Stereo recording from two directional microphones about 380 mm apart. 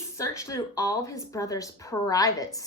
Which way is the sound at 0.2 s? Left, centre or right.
Centre.